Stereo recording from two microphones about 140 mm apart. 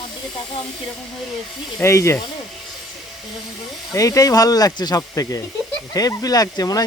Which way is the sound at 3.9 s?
25° left (ahead or behind).